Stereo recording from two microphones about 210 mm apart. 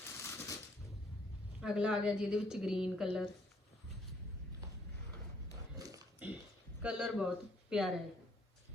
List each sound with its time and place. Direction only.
0.0 s a sound: 15° left (ahead or behind)
1.6 s a woman's voice: 5° right (ahead or behind)
5.7 s dog: 15° right (ahead or behind)
6.8 s speech: 5° right (ahead or behind)